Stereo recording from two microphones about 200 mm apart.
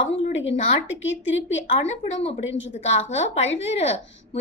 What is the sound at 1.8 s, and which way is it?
Speech, 30° left (ahead or behind).